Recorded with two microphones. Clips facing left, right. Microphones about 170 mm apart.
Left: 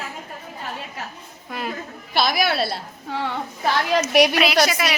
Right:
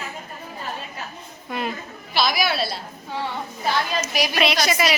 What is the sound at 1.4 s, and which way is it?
Speech, centre (ahead or behind).